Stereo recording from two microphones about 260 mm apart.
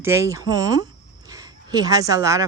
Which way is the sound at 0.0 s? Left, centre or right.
Centre.